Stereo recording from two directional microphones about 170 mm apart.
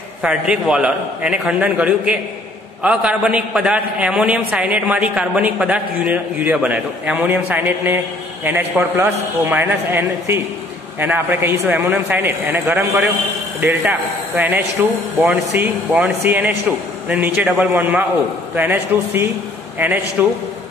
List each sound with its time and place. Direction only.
0.2 s a man's voice: 5° right (ahead or behind)